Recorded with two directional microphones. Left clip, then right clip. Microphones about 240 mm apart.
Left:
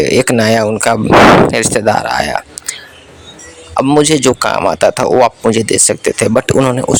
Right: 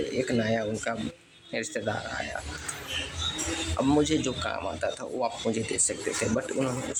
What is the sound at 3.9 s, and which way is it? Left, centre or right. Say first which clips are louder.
Speech: left 17 dB; left.